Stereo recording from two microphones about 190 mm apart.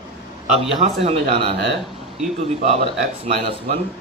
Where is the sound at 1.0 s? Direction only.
35° right (ahead or behind).